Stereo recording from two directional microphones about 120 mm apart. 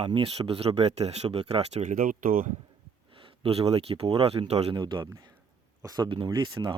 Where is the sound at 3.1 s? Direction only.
50° right (ahead or behind).